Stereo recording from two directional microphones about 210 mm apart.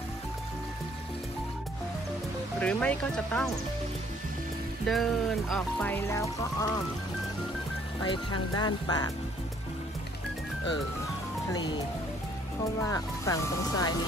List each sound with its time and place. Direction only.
2.6 s speech: 5° left (ahead or behind)
4.8 s speech: centre (ahead or behind)
8.0 s speech: 20° left (ahead or behind)
11.5 s speech: 20° left (ahead or behind)
12.8 s speech: 15° left (ahead or behind)